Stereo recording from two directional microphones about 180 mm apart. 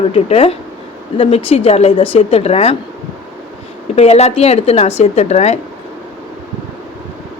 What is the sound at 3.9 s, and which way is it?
Speech, 35° left (ahead or behind).